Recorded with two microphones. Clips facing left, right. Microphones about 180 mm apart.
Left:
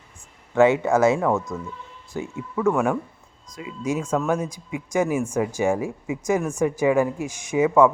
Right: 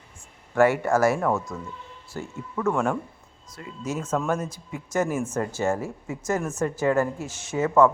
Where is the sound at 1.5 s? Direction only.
5° left (ahead or behind).